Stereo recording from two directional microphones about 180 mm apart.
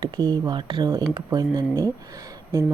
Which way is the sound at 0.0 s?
20° right (ahead or behind).